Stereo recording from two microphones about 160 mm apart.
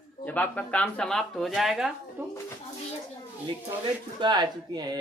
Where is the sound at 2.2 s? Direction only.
10° right (ahead or behind).